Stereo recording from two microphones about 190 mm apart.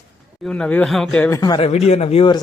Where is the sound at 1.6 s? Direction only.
35° left (ahead or behind).